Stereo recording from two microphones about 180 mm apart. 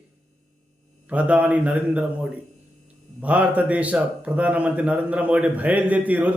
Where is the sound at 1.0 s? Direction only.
10° right (ahead or behind).